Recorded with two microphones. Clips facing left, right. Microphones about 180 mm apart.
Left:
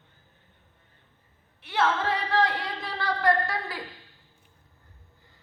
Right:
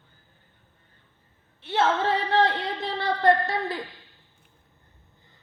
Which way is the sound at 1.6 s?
25° right (ahead or behind).